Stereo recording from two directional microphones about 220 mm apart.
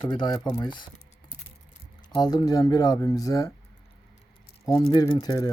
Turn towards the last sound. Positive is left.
turn(degrees=20)  # may be behind; listen again after turning